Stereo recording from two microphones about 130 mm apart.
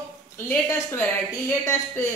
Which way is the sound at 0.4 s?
20° left (ahead or behind).